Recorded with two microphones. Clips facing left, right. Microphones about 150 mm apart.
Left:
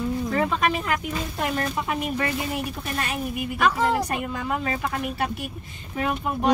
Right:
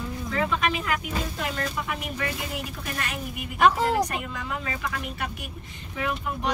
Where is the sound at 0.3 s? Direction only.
40° left (ahead or behind).